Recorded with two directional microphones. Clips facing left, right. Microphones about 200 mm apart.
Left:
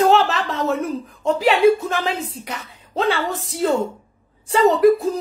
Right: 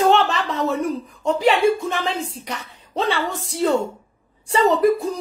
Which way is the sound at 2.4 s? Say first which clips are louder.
Even; centre (ahead or behind).